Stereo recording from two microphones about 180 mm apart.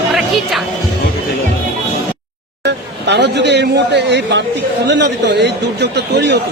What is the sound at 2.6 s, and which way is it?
A man's voice, 70° right (ahead or behind).